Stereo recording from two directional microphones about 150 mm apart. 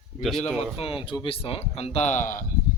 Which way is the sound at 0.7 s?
35° left (ahead or behind).